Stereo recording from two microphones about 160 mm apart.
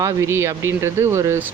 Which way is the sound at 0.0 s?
15° right (ahead or behind).